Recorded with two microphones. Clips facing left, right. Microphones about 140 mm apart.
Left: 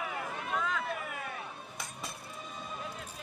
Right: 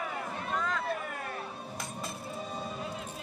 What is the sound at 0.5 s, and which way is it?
Music, 5° left (ahead or behind).